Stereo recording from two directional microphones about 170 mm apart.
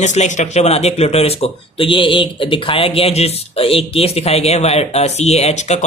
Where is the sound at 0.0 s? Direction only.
45° left (ahead or behind).